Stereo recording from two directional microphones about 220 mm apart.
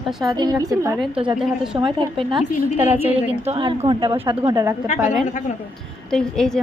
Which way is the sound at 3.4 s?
25° right (ahead or behind).